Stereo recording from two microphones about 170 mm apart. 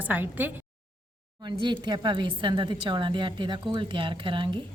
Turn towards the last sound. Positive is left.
turn(degrees=-30)  # may be behind; listen again after turning